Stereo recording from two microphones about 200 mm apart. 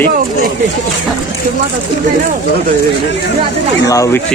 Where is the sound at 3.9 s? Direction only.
15° left (ahead or behind).